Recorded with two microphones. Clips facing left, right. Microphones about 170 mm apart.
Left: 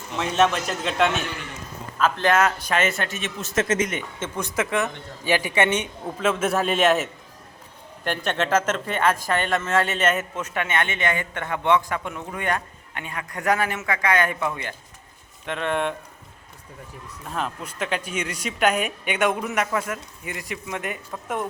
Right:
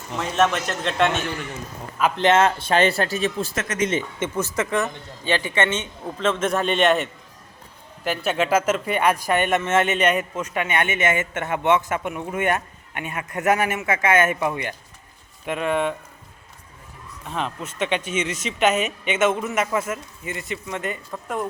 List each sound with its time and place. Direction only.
0.2 s speech: centre (ahead or behind)
2.0 s a man's voice: 15° right (ahead or behind); by 3.5 s 35° right (ahead or behind)
3.5 s speech: 30° left (ahead or behind)
4.2 s a man's voice: 5° right (ahead or behind)
17.2 s speech: centre (ahead or behind)